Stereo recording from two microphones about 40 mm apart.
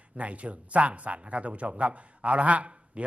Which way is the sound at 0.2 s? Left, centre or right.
Right.